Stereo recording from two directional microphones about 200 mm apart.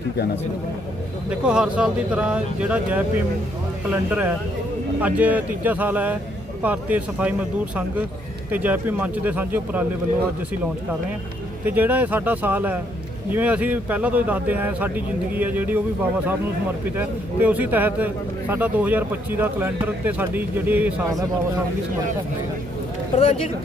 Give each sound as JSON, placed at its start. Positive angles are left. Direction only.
{"t": 1.3, "sound": "speech", "side_deg": -5}
{"t": 8.4, "sound": "speech", "side_deg": -10}
{"t": 11.6, "sound": "speech", "side_deg": -10}
{"t": 17.0, "sound": "speech", "side_deg": -10}
{"t": 23.1, "sound": "speech", "side_deg": 30}